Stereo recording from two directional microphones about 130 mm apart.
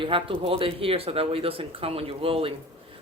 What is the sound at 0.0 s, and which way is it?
A man's voice, 45° right (ahead or behind).